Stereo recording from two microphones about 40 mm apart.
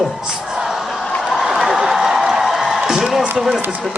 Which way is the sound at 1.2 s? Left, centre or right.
Centre.